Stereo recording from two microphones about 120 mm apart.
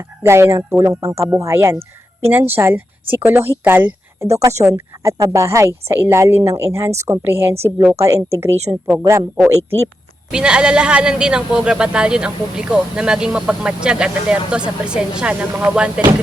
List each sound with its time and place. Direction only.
0.2 s a man's voice: 20° right (ahead or behind)
10.3 s a man's voice: 5° right (ahead or behind)